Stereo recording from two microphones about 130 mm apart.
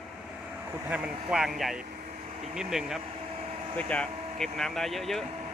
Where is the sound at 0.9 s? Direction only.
10° right (ahead or behind).